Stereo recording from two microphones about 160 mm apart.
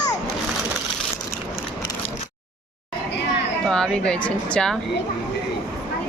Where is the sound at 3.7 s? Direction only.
5° left (ahead or behind).